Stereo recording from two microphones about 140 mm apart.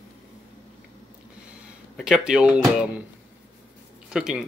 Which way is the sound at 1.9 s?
5° right (ahead or behind).